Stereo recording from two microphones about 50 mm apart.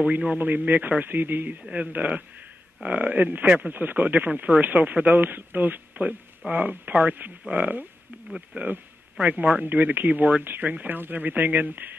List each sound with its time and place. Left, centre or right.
0.0 s a man's voice: right
0.4 s speech: right
1.7 s speech: right